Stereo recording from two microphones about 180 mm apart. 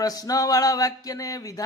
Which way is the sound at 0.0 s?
20° left (ahead or behind).